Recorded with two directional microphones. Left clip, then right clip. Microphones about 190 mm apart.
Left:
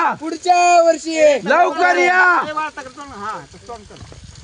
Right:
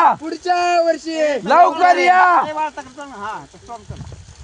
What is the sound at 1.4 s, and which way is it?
Speech, 20° right (ahead or behind).